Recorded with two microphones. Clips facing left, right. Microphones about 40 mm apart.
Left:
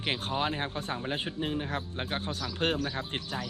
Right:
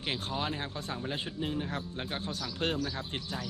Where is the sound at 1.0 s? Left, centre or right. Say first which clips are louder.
Left 1 dB; left.